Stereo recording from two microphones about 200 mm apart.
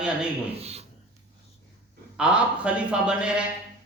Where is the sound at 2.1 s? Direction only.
5° right (ahead or behind).